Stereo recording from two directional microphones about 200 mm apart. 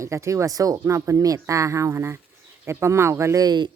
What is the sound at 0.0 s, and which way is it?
A woman's voice, 15° right (ahead or behind).